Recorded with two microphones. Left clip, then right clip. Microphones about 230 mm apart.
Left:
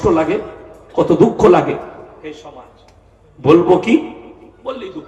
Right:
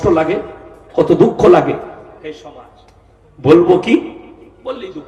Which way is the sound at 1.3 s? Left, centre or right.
Right.